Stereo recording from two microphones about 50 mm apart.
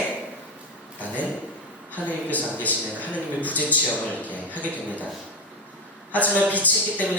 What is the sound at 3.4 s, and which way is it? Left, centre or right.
Speech, left.